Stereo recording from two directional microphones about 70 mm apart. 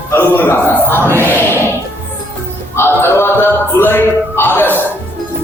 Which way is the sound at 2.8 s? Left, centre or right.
Left.